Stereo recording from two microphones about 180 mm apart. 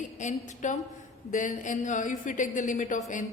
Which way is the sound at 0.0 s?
45° left (ahead or behind).